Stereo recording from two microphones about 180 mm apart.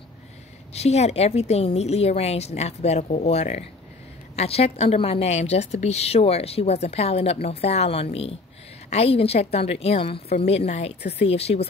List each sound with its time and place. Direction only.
0.7 s a woman's voice: 35° left (ahead or behind)